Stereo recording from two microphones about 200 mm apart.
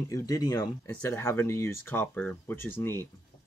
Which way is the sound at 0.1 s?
15° left (ahead or behind).